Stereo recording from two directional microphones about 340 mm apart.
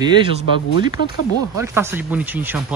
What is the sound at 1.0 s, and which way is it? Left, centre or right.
Speech, left.